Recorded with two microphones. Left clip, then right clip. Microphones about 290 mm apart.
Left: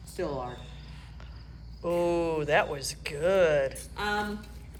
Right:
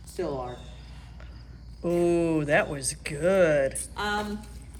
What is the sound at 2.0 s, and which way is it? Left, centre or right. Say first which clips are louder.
Speech: right 4 dB; centre.